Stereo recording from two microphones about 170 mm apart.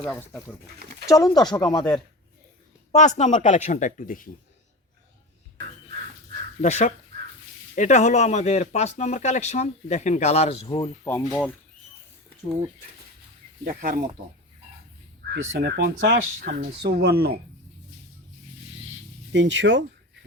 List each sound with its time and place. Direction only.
0.0 s speech: 5° left (ahead or behind)
1.0 s speech: 20° left (ahead or behind)
2.9 s speech: 45° left (ahead or behind)
6.6 s speech: 45° left (ahead or behind)
10.8 s speech: 15° left (ahead or behind)
13.7 s speech: 60° right (ahead or behind)
15.3 s speech: 70° right (ahead or behind)
19.3 s speech: 90° right